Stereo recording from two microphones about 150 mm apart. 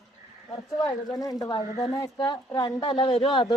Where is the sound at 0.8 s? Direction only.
25° left (ahead or behind).